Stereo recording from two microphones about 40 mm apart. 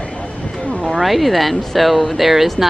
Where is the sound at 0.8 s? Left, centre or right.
Centre.